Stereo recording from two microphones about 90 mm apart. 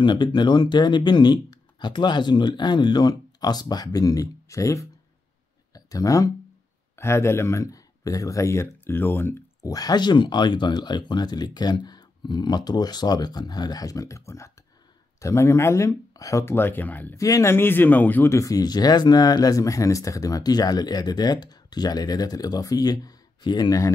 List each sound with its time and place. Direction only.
0.0 s speech: 60° left (ahead or behind); by 4.8 s 35° left (ahead or behind)
5.9 s speech: 40° left (ahead or behind)
9.7 s speech: 45° left (ahead or behind)
16.4 s speech: 25° left (ahead or behind)
17.1 s speech: 35° left (ahead or behind); by 18.3 s 20° left (ahead or behind)
18.3 s speech: 40° left (ahead or behind)